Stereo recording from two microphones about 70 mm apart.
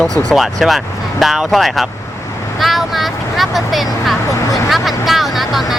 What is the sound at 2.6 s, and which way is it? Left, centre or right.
Vehicle, centre.